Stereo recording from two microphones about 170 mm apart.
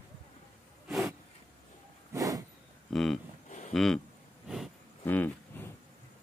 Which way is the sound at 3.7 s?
Centre (ahead or behind).